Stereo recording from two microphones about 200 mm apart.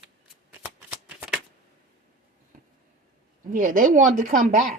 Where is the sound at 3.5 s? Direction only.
40° right (ahead or behind).